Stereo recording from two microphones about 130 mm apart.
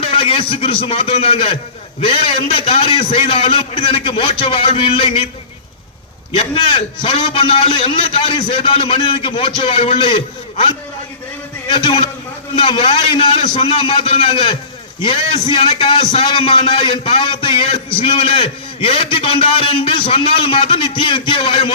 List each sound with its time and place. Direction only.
0.0 s a man's voice: 45° left (ahead or behind)
6.3 s a man's voice: 50° left (ahead or behind)
11.7 s a man's voice: 45° left (ahead or behind)